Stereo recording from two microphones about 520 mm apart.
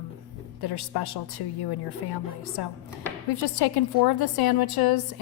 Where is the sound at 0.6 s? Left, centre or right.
Left.